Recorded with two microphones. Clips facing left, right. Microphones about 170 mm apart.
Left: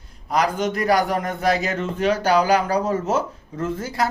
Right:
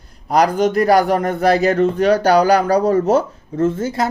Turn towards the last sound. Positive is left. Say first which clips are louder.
# right 6 dB
turn(degrees=-25)  # may be behind; listen again after turning